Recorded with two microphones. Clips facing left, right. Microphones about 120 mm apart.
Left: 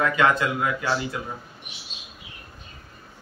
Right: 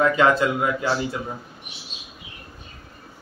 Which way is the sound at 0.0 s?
30° right (ahead or behind).